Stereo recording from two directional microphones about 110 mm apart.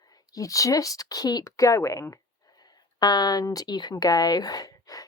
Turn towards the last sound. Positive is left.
turn(degrees=35)  # may be behind; listen again after turning